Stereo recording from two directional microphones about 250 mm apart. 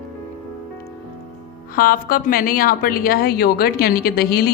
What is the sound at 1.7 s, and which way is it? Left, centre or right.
A woman's voice, left.